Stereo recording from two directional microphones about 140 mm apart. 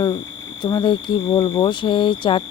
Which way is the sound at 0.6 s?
35° left (ahead or behind).